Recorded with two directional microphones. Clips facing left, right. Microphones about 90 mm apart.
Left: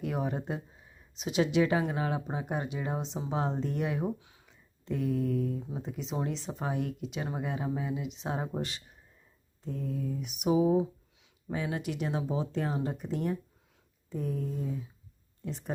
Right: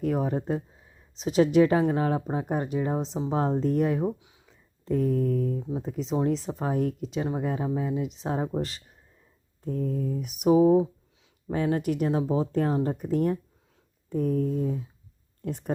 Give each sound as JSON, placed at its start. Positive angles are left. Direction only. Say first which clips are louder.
{"t": 0.0, "sound": "speech", "louder": "right 6 dB", "side_deg": -35}
{"t": 4.0, "sound": "speech", "louder": "right 5 dB", "side_deg": -20}
{"t": 4.9, "sound": "speech", "louder": "right 5 dB", "side_deg": -40}
{"t": 9.6, "sound": "speech", "louder": "right 6 dB", "side_deg": -45}